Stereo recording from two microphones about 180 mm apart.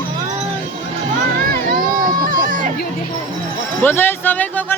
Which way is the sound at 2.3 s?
45° right (ahead or behind).